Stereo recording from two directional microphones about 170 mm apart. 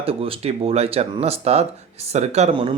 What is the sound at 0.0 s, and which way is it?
Speech, 35° right (ahead or behind).